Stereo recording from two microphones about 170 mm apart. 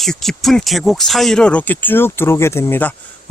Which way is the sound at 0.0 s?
Centre (ahead or behind).